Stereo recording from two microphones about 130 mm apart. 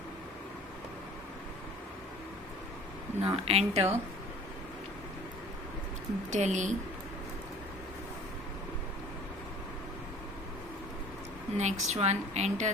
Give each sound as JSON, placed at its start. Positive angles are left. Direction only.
{"t": 3.2, "sound": "speech", "side_deg": -50}
{"t": 6.3, "sound": "speech", "side_deg": -65}
{"t": 11.5, "sound": "a woman's voice", "side_deg": -60}